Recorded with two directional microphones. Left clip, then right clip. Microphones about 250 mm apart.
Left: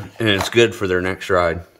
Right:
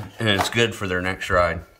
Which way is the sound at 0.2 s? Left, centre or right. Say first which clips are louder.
Left 4 dB; centre.